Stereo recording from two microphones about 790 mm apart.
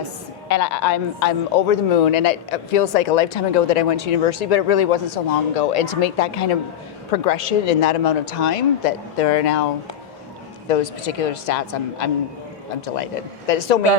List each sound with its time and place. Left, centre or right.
0.4 s speech: left
10.7 s speech: left
13.5 s speech: left